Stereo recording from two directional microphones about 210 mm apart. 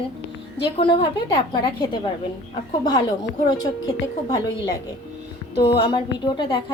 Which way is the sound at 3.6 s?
20° left (ahead or behind).